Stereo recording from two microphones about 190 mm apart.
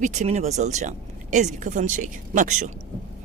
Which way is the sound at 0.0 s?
40° right (ahead or behind).